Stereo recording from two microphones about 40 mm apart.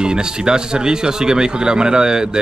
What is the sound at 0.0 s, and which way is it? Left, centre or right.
Speech, right.